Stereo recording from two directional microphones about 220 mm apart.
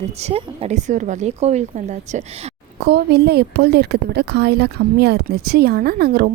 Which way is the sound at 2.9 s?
45° right (ahead or behind).